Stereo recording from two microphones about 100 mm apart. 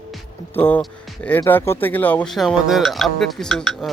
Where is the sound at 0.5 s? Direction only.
20° left (ahead or behind).